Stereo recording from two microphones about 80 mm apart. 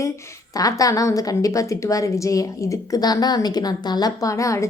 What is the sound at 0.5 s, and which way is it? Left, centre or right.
A woman's voice, left.